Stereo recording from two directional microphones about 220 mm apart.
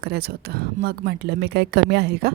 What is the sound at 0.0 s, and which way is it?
Speech, 45° right (ahead or behind).